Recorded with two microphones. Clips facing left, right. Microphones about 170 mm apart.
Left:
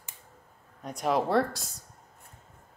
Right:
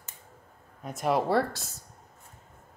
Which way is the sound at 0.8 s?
Centre (ahead or behind).